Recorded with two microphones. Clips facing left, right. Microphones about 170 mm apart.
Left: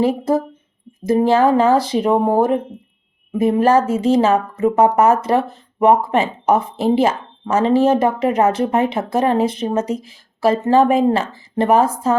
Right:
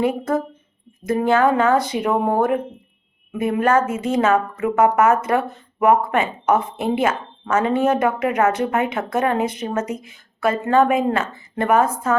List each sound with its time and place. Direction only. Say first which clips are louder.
1.0 s speech: left 3 dB; 30° left (ahead or behind)